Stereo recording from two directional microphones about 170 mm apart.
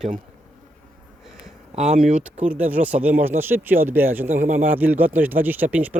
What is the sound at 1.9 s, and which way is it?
Speech, 45° right (ahead or behind).